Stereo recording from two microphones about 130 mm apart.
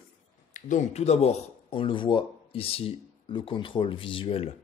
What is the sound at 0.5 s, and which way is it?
Speech, 80° left.